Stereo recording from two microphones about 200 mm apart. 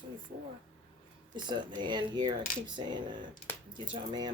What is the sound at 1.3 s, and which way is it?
Speech, 20° right (ahead or behind).